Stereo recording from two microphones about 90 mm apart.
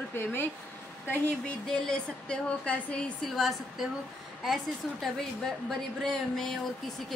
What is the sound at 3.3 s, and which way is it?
A woman's voice, centre (ahead or behind).